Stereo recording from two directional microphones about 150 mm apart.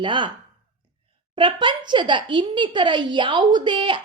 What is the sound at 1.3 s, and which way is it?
A woman's voice, 35° right (ahead or behind).